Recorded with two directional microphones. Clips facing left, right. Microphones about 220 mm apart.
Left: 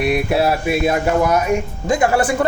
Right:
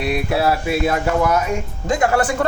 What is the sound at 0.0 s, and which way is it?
Speech, 20° left (ahead or behind).